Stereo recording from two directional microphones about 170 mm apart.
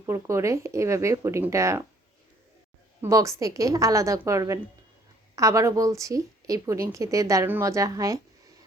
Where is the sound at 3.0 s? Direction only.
15° right (ahead or behind).